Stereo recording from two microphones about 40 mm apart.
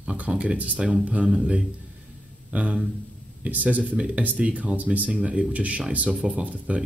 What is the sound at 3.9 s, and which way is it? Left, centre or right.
Speech, right.